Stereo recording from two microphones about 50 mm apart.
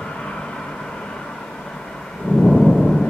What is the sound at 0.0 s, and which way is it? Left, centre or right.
Vehicle, centre.